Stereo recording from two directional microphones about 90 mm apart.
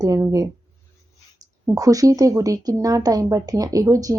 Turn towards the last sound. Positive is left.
turn(degrees=-40)  # may be behind; listen again after turning